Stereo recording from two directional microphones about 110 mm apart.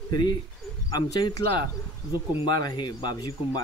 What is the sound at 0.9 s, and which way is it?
Speech, 40° left (ahead or behind).